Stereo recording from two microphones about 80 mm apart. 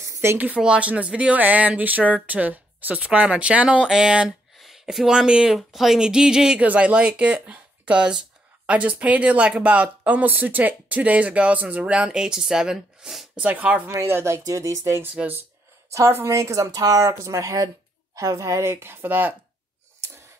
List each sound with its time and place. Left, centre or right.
0.1 s a sound: right
0.6 s speech: centre
13.4 s speech: centre
13.8 s speech: right